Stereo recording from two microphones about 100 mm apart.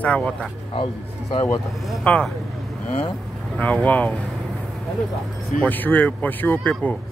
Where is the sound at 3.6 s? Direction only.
15° left (ahead or behind).